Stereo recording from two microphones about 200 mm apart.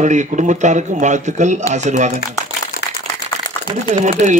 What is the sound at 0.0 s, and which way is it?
A man's voice, 35° right (ahead or behind).